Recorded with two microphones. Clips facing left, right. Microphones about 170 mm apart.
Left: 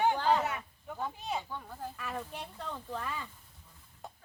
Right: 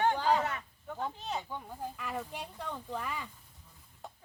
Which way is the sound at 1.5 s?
15° right (ahead or behind).